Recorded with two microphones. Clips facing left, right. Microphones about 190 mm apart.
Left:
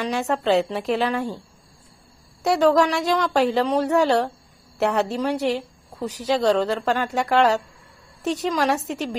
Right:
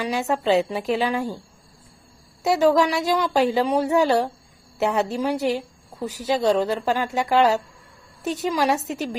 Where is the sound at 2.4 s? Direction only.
5° right (ahead or behind).